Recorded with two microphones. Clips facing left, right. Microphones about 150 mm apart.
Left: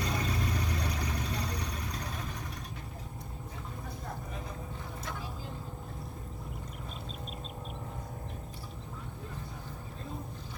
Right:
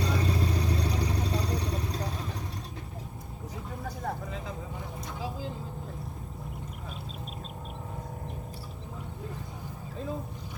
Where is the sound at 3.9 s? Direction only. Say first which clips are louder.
Right 9 dB; 90° right.